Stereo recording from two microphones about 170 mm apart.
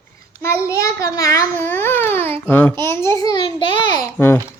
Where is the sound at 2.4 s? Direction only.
10° left (ahead or behind).